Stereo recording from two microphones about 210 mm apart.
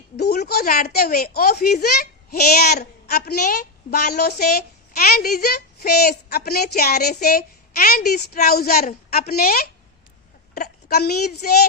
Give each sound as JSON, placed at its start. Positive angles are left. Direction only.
{"t": 0.3, "sound": "a woman's voice", "side_deg": 45}